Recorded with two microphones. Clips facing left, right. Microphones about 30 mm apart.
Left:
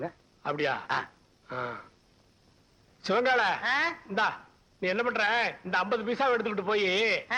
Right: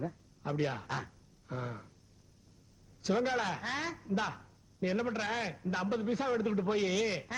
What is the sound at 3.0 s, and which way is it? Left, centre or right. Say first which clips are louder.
Speech: left 7 dB; left.